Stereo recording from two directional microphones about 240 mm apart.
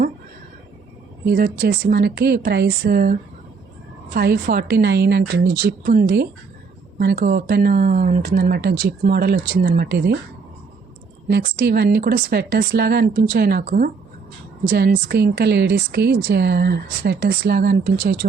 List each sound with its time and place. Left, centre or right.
1.3 s speech: right
11.3 s speech: right